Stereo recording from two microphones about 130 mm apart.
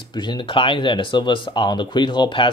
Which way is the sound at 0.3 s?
40° left (ahead or behind).